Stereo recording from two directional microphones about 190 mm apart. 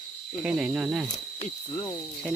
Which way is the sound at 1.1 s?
20° left (ahead or behind).